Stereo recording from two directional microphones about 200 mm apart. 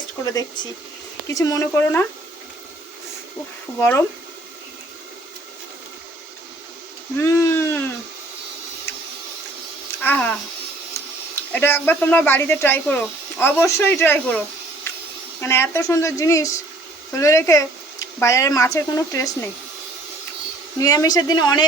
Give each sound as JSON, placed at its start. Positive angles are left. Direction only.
{"t": 0.3, "sound": "speech", "side_deg": 20}
{"t": 3.8, "sound": "speech", "side_deg": 10}
{"t": 7.2, "sound": "a sound", "side_deg": 15}
{"t": 10.0, "sound": "a sound", "side_deg": 10}
{"t": 11.5, "sound": "speech", "side_deg": 10}
{"t": 20.7, "sound": "a woman's voice", "side_deg": 20}